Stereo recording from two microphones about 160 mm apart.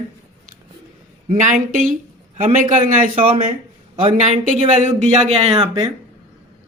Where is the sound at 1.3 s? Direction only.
55° right (ahead or behind).